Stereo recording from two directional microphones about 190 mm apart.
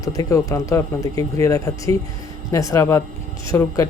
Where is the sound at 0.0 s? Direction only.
20° left (ahead or behind).